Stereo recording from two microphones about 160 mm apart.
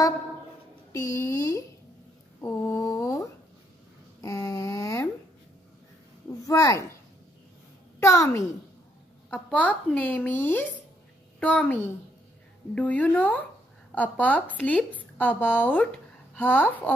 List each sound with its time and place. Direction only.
0.9 s speech: 20° left (ahead or behind)
2.4 s a sound: 15° left (ahead or behind)
6.4 s speech: 20° left (ahead or behind)
8.0 s speech: 20° left (ahead or behind)
9.3 s a woman's voice: 10° left (ahead or behind)